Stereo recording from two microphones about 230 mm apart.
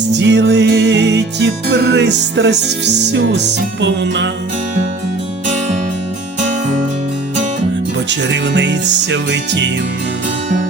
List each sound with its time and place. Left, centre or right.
0.1 s music: right
6.4 s music: right
8.3 s music: right